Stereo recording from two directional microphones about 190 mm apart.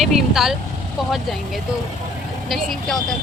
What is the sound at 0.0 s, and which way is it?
Speech, centre (ahead or behind).